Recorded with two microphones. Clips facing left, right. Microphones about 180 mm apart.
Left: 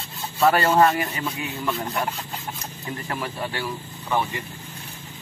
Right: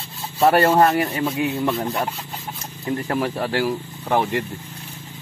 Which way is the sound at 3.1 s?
45° right (ahead or behind).